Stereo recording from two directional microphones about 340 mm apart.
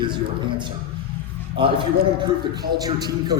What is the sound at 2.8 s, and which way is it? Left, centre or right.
Speech, centre.